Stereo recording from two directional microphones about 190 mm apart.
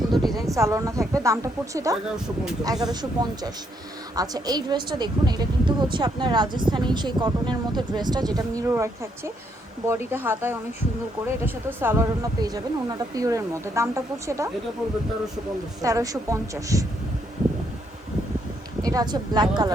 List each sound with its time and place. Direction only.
0.1 s a sound: centre (ahead or behind)
0.3 s speech: 15° right (ahead or behind)
15.8 s speech: 15° right (ahead or behind)
18.8 s speech: 20° right (ahead or behind)